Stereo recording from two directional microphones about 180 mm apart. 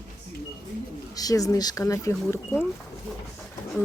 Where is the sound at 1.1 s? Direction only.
20° left (ahead or behind).